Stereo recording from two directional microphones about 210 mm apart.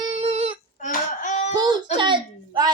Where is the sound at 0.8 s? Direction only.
35° left (ahead or behind).